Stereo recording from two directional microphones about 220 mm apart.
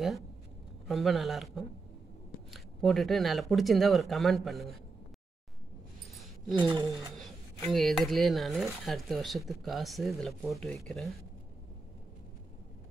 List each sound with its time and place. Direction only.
0.8 s speech: centre (ahead or behind)
6.5 s speech: 20° right (ahead or behind)
7.2 s speech: centre (ahead or behind)